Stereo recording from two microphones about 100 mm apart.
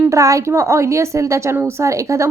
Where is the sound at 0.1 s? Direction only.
35° right (ahead or behind).